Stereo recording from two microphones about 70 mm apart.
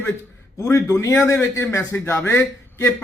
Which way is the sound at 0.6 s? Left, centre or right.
Left.